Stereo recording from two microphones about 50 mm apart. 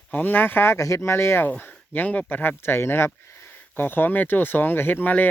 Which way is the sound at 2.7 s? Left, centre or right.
Left.